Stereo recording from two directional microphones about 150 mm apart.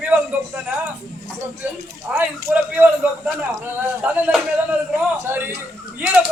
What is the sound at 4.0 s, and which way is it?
A man's voice, 10° right (ahead or behind).